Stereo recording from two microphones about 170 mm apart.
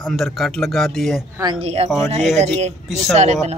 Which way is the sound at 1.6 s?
40° right (ahead or behind).